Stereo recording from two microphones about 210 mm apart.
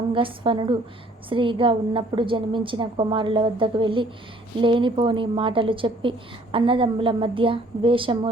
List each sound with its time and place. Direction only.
0.1 s a woman's voice: 25° right (ahead or behind)